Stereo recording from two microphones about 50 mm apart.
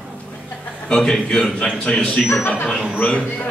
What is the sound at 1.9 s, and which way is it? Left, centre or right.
Speech, left.